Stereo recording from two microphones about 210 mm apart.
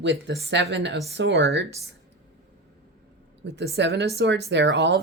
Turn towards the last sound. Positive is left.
turn(degrees=-55)  # may be behind; listen again after turning